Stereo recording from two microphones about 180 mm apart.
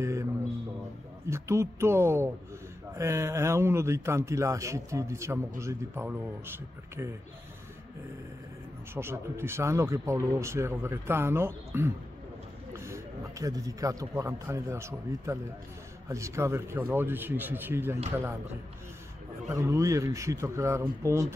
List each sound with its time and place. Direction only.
0.0 s a sound: 15° right (ahead or behind)
1.2 s speech: 15° right (ahead or behind)
8.9 s a man's voice: 15° right (ahead or behind)
19.5 s speech: 15° right (ahead or behind)